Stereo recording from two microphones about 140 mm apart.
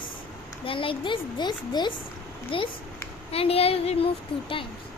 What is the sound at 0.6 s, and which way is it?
A woman's voice, 40° left (ahead or behind).